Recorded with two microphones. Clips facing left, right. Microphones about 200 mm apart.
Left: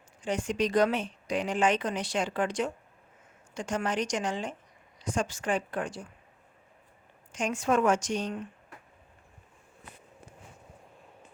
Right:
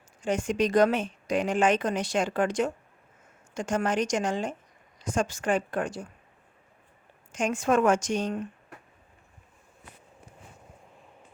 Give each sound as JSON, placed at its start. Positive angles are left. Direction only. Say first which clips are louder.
{"t": 0.2, "sound": "speech", "louder": "right 3 dB", "side_deg": -50}
{"t": 7.3, "sound": "speech", "louder": "right 3 dB", "side_deg": -50}